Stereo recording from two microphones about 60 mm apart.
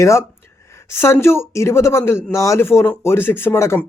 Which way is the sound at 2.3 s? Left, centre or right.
Left.